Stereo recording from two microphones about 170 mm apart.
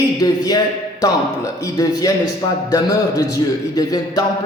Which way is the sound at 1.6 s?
20° left (ahead or behind).